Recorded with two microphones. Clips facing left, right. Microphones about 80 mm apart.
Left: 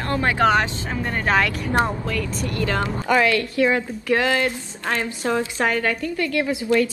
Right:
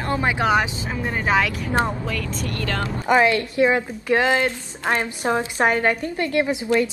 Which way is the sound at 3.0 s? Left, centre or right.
Right.